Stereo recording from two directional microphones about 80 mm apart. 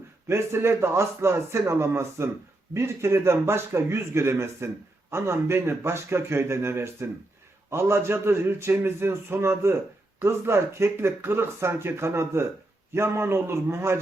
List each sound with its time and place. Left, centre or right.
0.3 s a man's voice: right